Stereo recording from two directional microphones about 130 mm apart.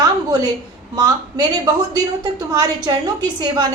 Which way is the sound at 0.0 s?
30° right (ahead or behind).